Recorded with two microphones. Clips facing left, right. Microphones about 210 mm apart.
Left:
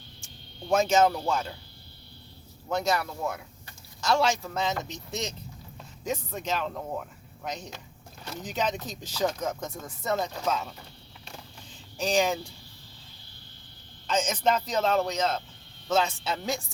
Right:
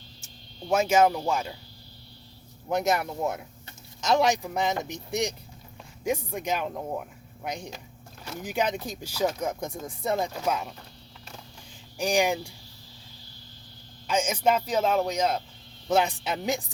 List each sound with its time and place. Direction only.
0.7 s speech: 10° right (ahead or behind)
2.6 s speech: 20° right (ahead or behind)
11.9 s speech: 15° right (ahead or behind)
14.1 s speech: 10° right (ahead or behind)